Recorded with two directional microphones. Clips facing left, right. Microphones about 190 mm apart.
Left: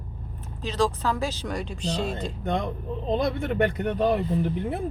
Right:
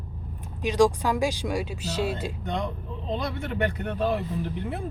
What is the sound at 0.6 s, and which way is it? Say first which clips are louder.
Speech: right 4 dB; 15° right (ahead or behind).